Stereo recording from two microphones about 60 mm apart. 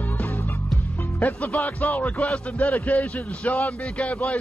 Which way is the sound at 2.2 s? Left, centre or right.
Left.